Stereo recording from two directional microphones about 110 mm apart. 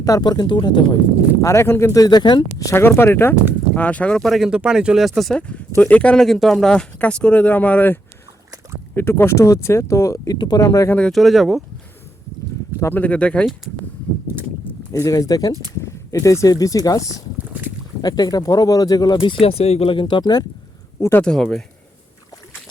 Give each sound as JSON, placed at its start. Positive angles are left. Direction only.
{"t": 0.0, "sound": "speech", "side_deg": 35}
{"t": 1.4, "sound": "speech", "side_deg": 25}
{"t": 2.7, "sound": "speech", "side_deg": 20}
{"t": 5.4, "sound": "speech", "side_deg": 15}
{"t": 9.0, "sound": "speech", "side_deg": 20}
{"t": 10.3, "sound": "speech", "side_deg": 40}
{"t": 10.8, "sound": "speech", "side_deg": 15}
{"t": 11.1, "sound": "speech", "side_deg": 0}
{"t": 12.8, "sound": "speech", "side_deg": 15}
{"t": 14.6, "sound": "speech", "side_deg": 30}
{"t": 17.3, "sound": "boat", "side_deg": -15}
{"t": 18.0, "sound": "speech", "side_deg": 35}
{"t": 21.0, "sound": "speech", "side_deg": 20}
{"t": 21.2, "sound": "speech", "side_deg": 5}